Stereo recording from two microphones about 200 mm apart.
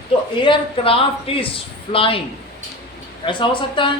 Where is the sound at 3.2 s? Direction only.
25° left (ahead or behind).